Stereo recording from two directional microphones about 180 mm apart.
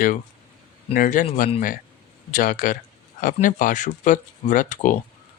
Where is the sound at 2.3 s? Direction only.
45° left (ahead or behind).